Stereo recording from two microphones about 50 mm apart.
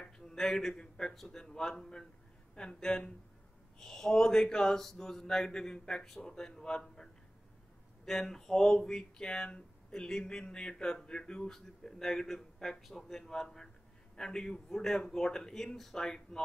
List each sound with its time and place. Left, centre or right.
0.0 s a man's voice: centre